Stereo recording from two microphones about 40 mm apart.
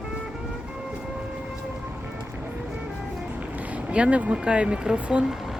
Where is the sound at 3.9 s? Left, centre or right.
Right.